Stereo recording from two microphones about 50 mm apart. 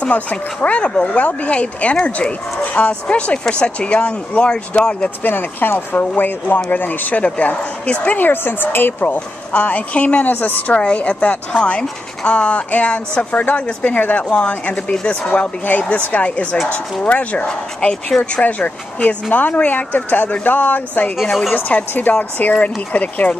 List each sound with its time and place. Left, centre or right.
0.0 s speech: left
5.2 s speech: left
8.2 s speech: left
9.0 s speech: left
10.3 s speech: left
10.8 s speech: left
17.5 s speech: centre
18.4 s speech: left